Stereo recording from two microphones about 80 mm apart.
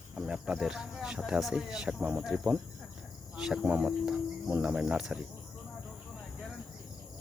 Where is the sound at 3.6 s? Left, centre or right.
Centre.